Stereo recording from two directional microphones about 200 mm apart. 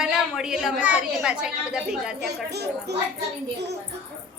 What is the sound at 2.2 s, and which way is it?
Speech, 55° right (ahead or behind).